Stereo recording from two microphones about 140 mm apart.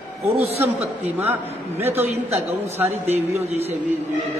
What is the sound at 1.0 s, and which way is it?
Speech, 15° right (ahead or behind).